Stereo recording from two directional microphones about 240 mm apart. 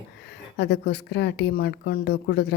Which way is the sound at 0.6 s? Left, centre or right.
Left.